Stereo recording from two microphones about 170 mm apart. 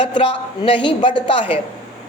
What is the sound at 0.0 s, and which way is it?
Speech, 30° left (ahead or behind).